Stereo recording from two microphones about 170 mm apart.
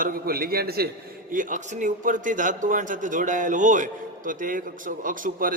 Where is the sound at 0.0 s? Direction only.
60° right (ahead or behind).